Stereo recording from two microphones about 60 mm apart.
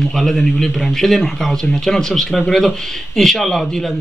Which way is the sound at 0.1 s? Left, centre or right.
Centre.